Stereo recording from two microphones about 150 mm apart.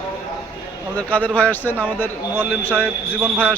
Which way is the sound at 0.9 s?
10° left (ahead or behind).